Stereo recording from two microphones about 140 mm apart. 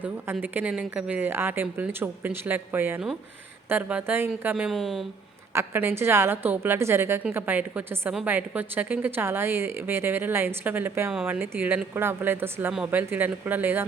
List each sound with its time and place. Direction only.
0.4 s a woman's voice: 10° right (ahead or behind)
5.5 s a woman's voice: 15° right (ahead or behind)